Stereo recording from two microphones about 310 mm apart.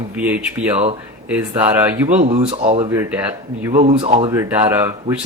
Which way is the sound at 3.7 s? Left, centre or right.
Right.